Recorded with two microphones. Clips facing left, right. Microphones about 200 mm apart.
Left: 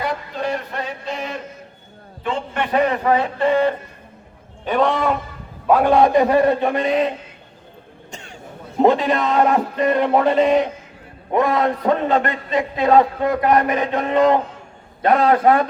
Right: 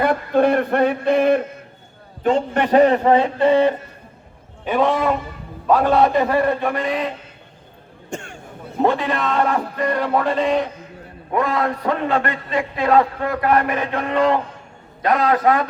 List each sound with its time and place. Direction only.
0.0 s a man's voice: 55° right (ahead or behind)
2.2 s a man's voice: 45° right (ahead or behind); by 3.8 s 20° right (ahead or behind)
4.6 s a man's voice: 5° right (ahead or behind)
5.6 s a man's voice: 10° left (ahead or behind)
8.1 s cough: 50° right (ahead or behind)
8.8 s a man's voice: 20° left (ahead or behind)